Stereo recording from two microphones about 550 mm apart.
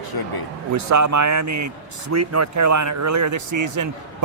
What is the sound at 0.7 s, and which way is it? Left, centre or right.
Speech, right.